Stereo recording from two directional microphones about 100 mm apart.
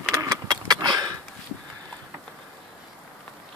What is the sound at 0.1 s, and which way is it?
Vehicle, 35° right (ahead or behind).